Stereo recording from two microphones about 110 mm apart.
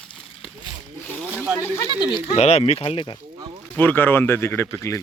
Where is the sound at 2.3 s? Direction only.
70° left (ahead or behind); by 3.1 s 55° left (ahead or behind).